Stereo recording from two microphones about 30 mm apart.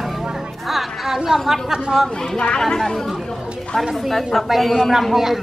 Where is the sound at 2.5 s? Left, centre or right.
Centre.